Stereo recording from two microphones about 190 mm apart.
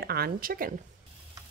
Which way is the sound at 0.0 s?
55° right (ahead or behind).